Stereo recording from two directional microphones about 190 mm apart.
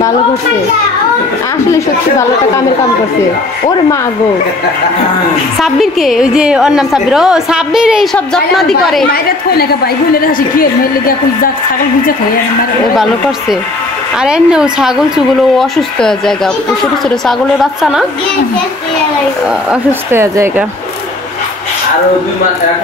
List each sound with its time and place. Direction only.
1.7 s speech: 15° left (ahead or behind)
5.6 s a woman's voice: centre (ahead or behind)
10.2 s a woman's voice: 50° left (ahead or behind)
12.9 s a woman's voice: centre (ahead or behind)
17.6 s a woman's voice: 5° right (ahead or behind)
19.7 s speech: 10° right (ahead or behind)